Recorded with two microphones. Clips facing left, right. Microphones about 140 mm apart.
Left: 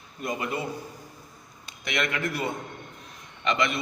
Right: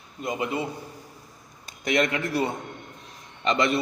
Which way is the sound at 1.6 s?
35° right (ahead or behind).